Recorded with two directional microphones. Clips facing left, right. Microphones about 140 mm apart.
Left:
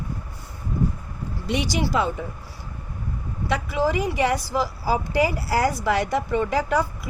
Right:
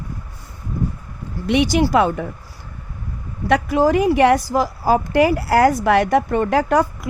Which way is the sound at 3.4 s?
55° right (ahead or behind).